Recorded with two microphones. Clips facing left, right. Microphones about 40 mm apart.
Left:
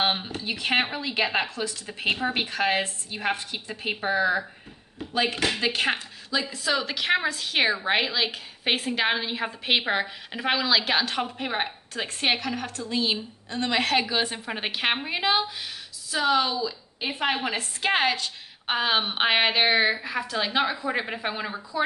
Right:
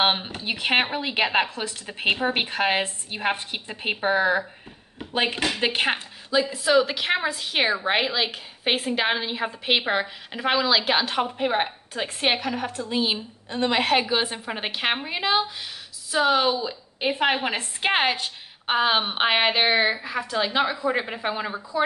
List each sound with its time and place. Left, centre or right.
0.0 s a woman's voice: right
4.9 s a sound: right
5.6 s a woman's voice: right
5.9 s a woman's voice: centre
16.2 s a woman's voice: centre
18.7 s a woman's voice: centre